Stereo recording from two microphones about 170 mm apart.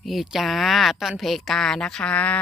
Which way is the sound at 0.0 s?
Centre (ahead or behind).